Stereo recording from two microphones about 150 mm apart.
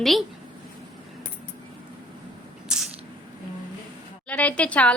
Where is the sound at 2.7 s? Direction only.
5° right (ahead or behind).